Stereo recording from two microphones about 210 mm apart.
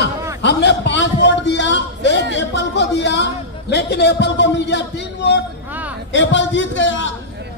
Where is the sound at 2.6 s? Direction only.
55° left (ahead or behind).